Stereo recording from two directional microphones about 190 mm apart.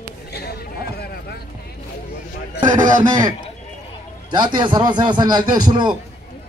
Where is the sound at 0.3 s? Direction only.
55° left (ahead or behind).